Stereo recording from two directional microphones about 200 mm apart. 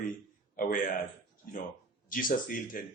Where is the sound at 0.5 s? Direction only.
45° left (ahead or behind).